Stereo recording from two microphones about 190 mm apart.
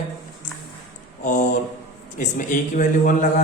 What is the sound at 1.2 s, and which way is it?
A man's voice, 40° left (ahead or behind).